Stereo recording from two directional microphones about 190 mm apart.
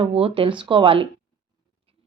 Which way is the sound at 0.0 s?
30° right (ahead or behind).